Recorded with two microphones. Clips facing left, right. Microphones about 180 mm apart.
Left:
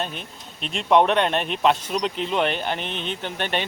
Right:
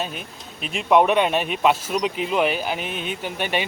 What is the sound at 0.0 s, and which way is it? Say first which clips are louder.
Speech: right 1 dB; 5° right (ahead or behind).